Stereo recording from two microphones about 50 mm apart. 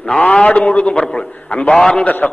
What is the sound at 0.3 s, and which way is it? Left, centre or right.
A man's voice, left.